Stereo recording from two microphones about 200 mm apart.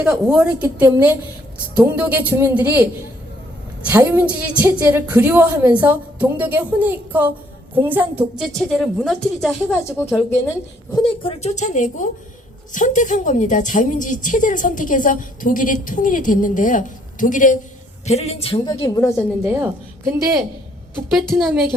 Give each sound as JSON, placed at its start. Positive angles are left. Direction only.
{"t": 0.0, "sound": "a woman's voice", "side_deg": -5}
{"t": 3.8, "sound": "a woman's voice", "side_deg": -10}
{"t": 10.9, "sound": "a woman's voice", "side_deg": 25}
{"t": 19.5, "sound": "a woman's voice", "side_deg": -10}
{"t": 21.1, "sound": "a woman's voice", "side_deg": 0}